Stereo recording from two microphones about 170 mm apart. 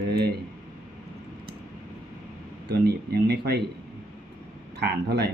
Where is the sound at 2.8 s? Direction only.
70° right (ahead or behind).